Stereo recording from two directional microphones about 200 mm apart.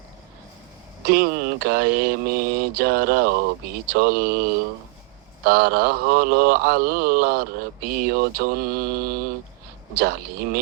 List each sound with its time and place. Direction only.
1.0 s mantra: 50° right (ahead or behind)
5.5 s mantra: 50° right (ahead or behind)